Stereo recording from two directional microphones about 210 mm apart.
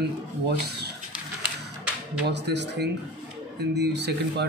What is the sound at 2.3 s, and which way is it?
A man's voice, 55° right (ahead or behind).